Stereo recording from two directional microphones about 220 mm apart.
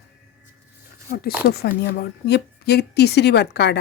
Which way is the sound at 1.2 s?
45° left (ahead or behind).